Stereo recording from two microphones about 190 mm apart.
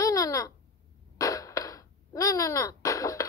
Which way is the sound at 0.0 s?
20° left (ahead or behind).